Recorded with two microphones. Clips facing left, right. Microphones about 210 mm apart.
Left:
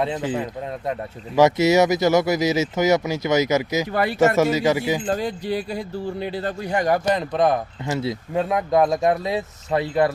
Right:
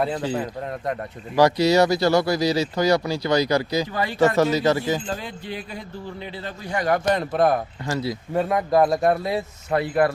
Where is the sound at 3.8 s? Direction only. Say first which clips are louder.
Left 4 dB; 65° left (ahead or behind).